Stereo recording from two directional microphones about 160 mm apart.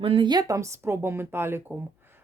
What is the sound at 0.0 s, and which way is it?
Speech, 30° right (ahead or behind).